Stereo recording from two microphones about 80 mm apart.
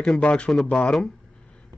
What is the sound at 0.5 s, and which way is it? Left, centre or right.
Speech, centre.